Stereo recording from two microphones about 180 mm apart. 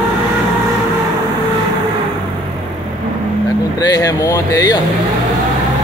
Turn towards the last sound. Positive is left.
turn(degrees=20)  # may be behind; listen again after turning